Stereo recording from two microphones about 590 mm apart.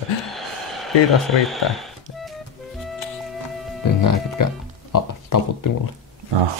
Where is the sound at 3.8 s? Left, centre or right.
Left.